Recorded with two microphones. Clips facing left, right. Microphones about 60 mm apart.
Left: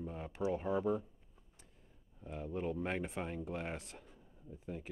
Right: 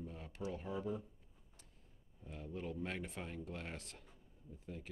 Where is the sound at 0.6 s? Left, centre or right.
Left.